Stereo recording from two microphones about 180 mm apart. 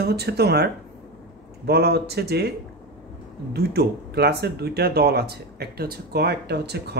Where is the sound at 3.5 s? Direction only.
60° right (ahead or behind).